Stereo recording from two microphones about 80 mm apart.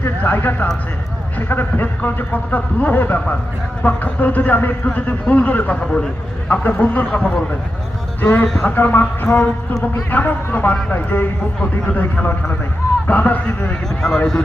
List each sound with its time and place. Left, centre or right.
0.2 s speech: left
6.5 s speech: left
13.8 s speech: centre